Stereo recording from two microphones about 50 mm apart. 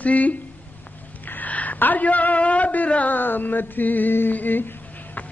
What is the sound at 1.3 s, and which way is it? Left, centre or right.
Speech, left.